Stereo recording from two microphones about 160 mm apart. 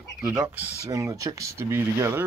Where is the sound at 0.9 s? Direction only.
20° right (ahead or behind).